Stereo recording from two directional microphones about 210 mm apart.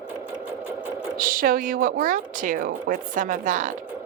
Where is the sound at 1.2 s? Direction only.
40° right (ahead or behind).